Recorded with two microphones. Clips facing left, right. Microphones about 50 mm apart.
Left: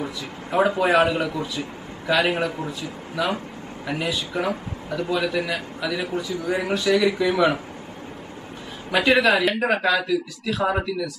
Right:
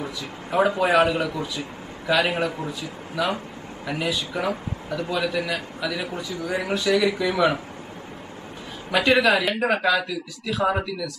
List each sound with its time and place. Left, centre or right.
0.0 s a man's voice: centre
8.9 s a man's voice: centre